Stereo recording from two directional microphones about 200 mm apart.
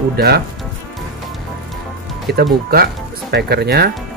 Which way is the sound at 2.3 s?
55° right (ahead or behind).